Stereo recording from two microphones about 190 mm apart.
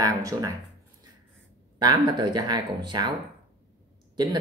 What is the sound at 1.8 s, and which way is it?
Speech, 20° right (ahead or behind).